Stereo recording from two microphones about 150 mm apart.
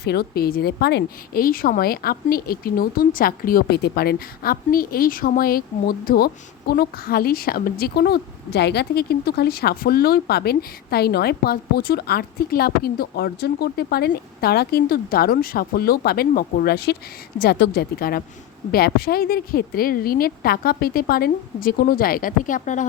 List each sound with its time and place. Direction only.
0.0 s a woman's voice: 90° left
6.1 s a woman's voice: 90° left; by 22.9 s 55° left (ahead or behind)